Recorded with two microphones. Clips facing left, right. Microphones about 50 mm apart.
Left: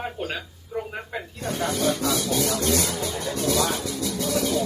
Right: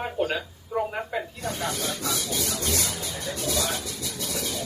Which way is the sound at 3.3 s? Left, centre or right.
Left.